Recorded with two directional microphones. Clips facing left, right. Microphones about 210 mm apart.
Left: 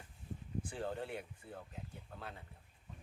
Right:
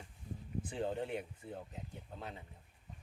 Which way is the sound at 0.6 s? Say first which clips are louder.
Right 4 dB; 20° right (ahead or behind).